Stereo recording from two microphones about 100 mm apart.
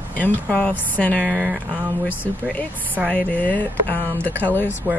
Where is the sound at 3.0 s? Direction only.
15° left (ahead or behind).